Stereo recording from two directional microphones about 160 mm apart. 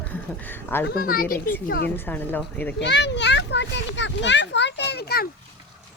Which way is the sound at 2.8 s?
90° left.